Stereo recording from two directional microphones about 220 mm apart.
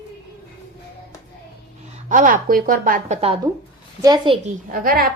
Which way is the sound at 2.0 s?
35° right (ahead or behind).